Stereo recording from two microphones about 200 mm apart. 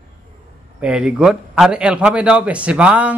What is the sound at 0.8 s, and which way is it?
A man's voice, 5° right (ahead or behind).